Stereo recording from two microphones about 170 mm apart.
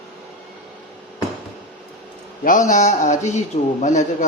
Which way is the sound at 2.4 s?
50° left (ahead or behind).